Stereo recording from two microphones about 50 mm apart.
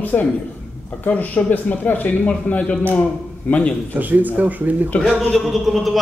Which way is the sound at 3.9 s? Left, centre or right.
Right.